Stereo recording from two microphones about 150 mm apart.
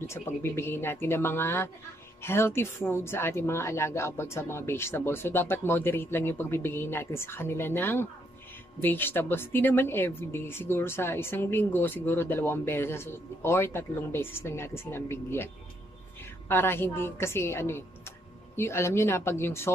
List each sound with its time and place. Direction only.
0.0 s speech: 15° left (ahead or behind)